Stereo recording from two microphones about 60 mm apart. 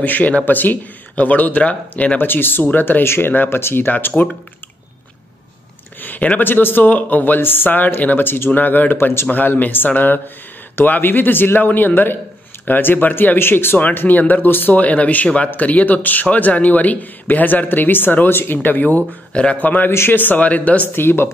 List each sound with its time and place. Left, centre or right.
0.0 s speech: left
2.1 s speech: left
5.9 s speech: left
8.9 s speech: left
9.3 s speech: left
19.9 s speech: left
20.9 s speech: left